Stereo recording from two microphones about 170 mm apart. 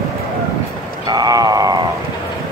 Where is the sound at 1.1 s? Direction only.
20° right (ahead or behind).